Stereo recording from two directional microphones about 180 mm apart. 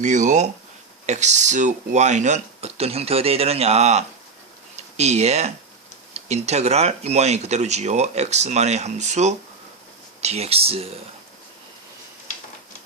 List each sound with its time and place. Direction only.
0.0 s speech: 45° right (ahead or behind)